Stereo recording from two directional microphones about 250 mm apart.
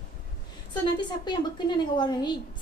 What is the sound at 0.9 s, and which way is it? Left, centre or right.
A woman's voice, centre.